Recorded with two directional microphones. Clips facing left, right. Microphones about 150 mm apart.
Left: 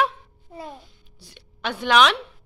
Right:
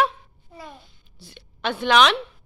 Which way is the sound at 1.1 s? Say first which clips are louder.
Right 4 dB; 10° left (ahead or behind).